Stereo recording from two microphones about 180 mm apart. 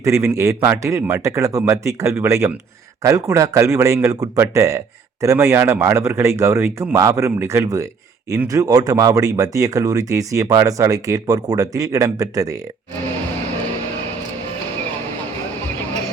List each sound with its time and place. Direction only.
0.0 s speech: 15° right (ahead or behind)